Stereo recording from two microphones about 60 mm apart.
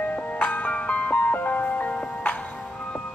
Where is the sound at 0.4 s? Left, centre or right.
Left.